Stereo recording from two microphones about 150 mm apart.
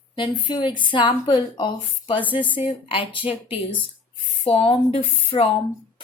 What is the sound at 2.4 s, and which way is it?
Speech, 10° right (ahead or behind).